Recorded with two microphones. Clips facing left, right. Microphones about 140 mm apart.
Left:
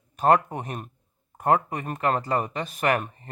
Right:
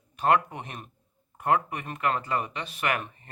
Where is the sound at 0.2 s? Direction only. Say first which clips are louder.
Left 4 dB; 40° left (ahead or behind).